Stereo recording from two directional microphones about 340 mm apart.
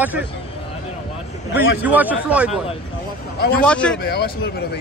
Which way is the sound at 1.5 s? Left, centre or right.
Centre.